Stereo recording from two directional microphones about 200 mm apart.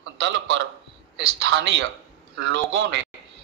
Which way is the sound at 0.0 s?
60° right (ahead or behind).